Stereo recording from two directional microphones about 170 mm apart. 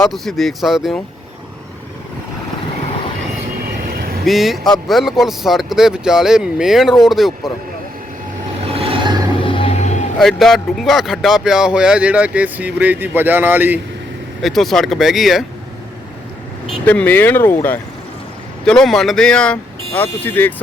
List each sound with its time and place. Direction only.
0.1 s speech: centre (ahead or behind)
3.9 s vehicle: 60° right (ahead or behind)
4.3 s speech: centre (ahead or behind)
8.6 s vehicle: 35° right (ahead or behind)
9.4 s music: 30° left (ahead or behind)
10.2 s speech: centre (ahead or behind)
14.4 s speech: centre (ahead or behind)
16.8 s speech: 10° left (ahead or behind)